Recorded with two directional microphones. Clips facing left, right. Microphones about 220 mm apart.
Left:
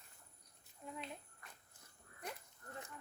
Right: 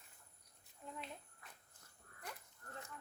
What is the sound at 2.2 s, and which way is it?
Sheep, 20° left (ahead or behind).